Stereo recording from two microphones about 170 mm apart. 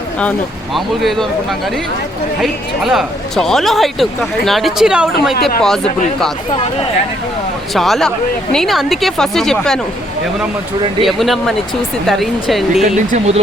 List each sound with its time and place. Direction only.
0.2 s speech: 5° left (ahead or behind)
7.7 s speech: centre (ahead or behind)
11.0 s speech: centre (ahead or behind)
13.1 s speech: 40° right (ahead or behind)